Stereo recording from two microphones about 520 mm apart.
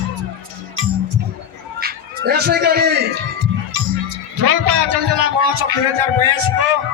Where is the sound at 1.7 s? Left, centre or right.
Centre.